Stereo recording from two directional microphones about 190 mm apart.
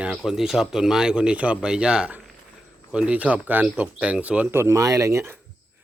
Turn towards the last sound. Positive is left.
turn(degrees=-15)  # may be behind; listen again after turning